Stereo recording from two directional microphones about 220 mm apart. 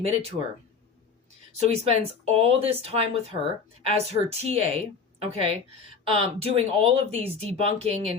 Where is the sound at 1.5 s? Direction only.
30° right (ahead or behind).